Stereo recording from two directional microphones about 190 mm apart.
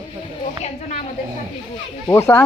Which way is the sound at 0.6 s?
40° left (ahead or behind).